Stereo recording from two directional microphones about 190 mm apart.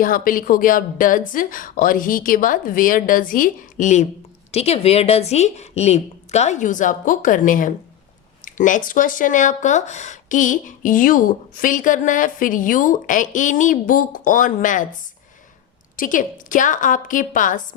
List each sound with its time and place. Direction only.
0.0 s a woman's voice: 45° left (ahead or behind)
16.0 s speech: 45° left (ahead or behind)